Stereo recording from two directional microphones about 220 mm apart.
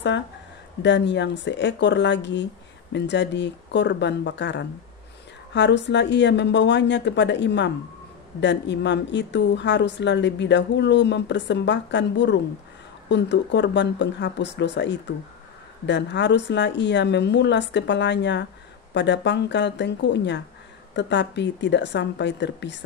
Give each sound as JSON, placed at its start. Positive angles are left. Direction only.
{"t": 0.8, "sound": "a woman's voice", "side_deg": 55}